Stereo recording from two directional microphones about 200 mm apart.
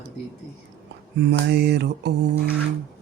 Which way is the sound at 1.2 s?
55° right (ahead or behind).